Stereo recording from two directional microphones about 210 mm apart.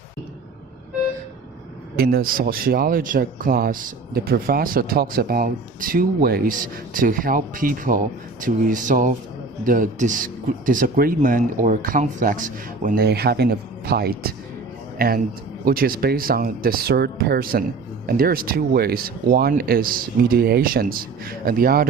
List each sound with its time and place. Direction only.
2.0 s speech: 45° right (ahead or behind)